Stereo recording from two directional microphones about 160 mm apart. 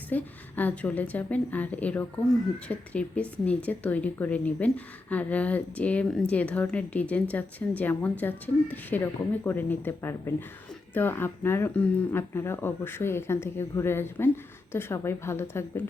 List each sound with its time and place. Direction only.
0.1 s speech: 10° left (ahead or behind)